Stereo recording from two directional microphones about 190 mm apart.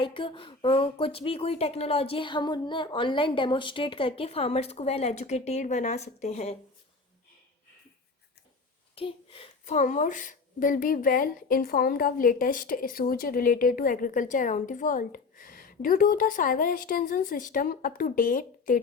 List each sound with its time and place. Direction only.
0.0 s speech: 25° left (ahead or behind)
9.0 s a woman's voice: 30° left (ahead or behind); by 18.8 s 45° left (ahead or behind)